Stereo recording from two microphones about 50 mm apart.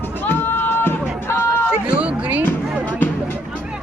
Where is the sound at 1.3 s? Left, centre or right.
Left.